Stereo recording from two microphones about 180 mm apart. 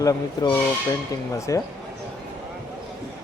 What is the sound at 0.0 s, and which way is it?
Speech, 20° left (ahead or behind).